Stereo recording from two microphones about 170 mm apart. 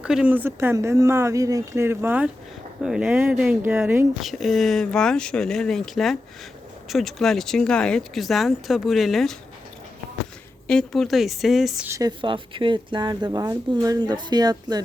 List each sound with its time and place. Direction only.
0.0 s speech: 5° right (ahead or behind)
4.2 s speech: centre (ahead or behind)
10.7 s speech: 5° left (ahead or behind)
11.9 s speech: 20° right (ahead or behind)